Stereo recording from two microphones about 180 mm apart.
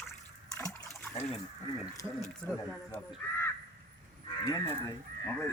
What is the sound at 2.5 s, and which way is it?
Speech, 10° left (ahead or behind).